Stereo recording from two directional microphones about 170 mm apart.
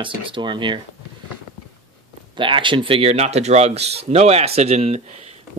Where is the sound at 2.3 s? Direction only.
30° right (ahead or behind).